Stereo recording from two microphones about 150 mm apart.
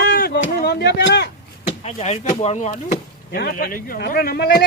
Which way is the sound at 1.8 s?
50° left (ahead or behind).